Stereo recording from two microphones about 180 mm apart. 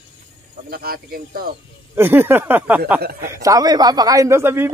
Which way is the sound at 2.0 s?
10° right (ahead or behind).